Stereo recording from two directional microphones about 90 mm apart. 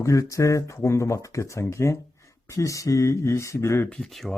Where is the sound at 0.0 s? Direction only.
35° left (ahead or behind).